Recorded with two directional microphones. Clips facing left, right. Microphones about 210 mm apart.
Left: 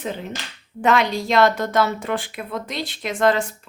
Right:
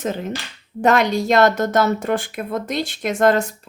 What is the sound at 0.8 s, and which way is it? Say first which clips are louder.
Speech: right 3 dB; 45° right (ahead or behind).